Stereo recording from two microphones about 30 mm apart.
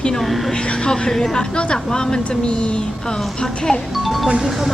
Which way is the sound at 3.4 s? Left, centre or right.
Left.